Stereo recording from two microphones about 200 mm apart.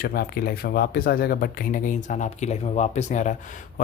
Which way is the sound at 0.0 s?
50° left (ahead or behind).